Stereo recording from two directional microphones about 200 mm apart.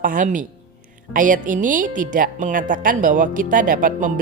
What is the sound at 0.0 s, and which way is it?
A woman's voice, 40° right (ahead or behind).